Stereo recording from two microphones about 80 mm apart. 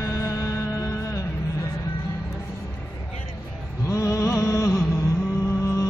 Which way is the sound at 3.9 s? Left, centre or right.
Left.